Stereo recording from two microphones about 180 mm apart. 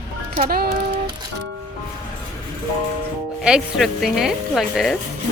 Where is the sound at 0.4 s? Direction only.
55° right (ahead or behind).